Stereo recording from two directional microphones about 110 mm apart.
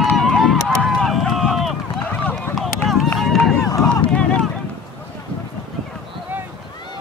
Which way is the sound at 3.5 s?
30° left (ahead or behind).